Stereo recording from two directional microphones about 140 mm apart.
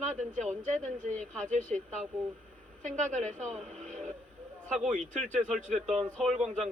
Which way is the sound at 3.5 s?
55° right (ahead or behind).